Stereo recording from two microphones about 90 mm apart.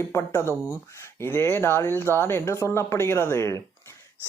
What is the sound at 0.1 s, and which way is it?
Speech, 30° left (ahead or behind).